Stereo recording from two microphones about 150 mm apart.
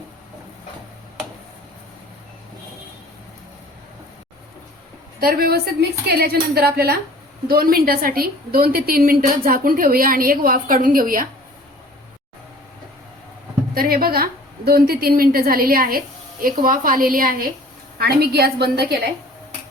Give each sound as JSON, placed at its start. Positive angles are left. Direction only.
{"t": 5.2, "sound": "a woman's voice", "side_deg": -90}
{"t": 13.7, "sound": "a woman's voice", "side_deg": -85}
{"t": 17.9, "sound": "a woman's voice", "side_deg": -90}